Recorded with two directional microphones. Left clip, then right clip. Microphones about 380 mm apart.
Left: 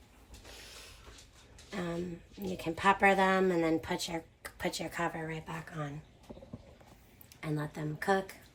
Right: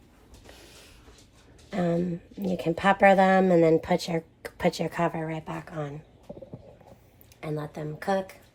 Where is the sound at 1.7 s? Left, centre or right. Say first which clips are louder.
Right 10 dB; right.